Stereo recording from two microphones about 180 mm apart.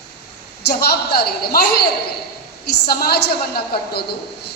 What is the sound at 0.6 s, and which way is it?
A woman's voice, 60° left (ahead or behind).